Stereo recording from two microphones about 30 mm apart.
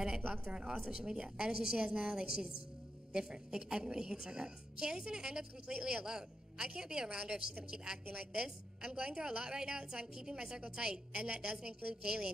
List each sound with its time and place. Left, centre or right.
0.2 s a woman's voice: right
11.1 s a woman's voice: right